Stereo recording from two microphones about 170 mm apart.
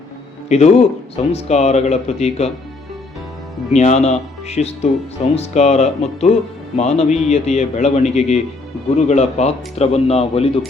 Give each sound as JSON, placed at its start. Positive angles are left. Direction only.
{"t": 0.4, "sound": "speech", "side_deg": 40}
{"t": 3.7, "sound": "speech", "side_deg": 40}